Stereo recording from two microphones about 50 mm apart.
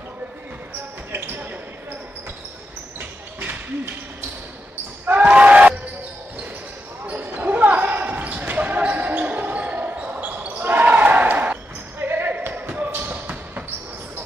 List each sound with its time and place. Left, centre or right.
1.1 s basketball bounce: right
3.0 s a sound: right
5.0 s basketball bounce: right
7.1 s basketball bounce: right
10.6 s basketball bounce: right
12.0 s basketball bounce: right
12.5 s basketball bounce: right